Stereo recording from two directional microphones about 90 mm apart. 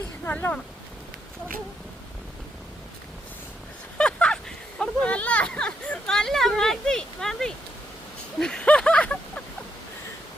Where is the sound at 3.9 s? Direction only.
10° left (ahead or behind).